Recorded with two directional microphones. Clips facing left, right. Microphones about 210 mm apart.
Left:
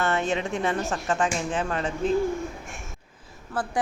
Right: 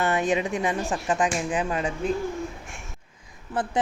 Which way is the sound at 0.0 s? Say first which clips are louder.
Right 2 dB; 15° right (ahead or behind).